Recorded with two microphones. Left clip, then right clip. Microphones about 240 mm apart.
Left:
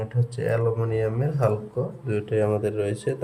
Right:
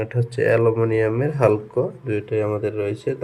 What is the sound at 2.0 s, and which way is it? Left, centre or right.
Speech, centre.